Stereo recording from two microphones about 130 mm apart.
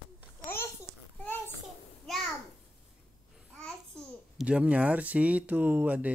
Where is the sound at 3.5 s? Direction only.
10° left (ahead or behind).